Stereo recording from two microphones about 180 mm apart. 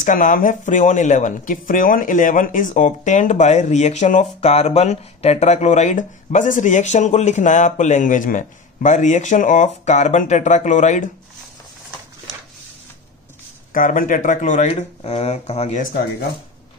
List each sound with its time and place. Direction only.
0.0 s speech: 45° left (ahead or behind)
13.7 s speech: 50° left (ahead or behind)